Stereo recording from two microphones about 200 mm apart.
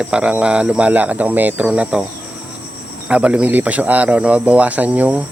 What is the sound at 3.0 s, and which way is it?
Speech, 5° right (ahead or behind).